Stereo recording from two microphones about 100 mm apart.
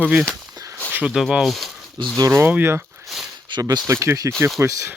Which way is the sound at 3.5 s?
45° right (ahead or behind).